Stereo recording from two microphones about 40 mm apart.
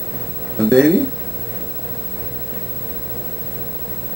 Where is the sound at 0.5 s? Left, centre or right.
Centre.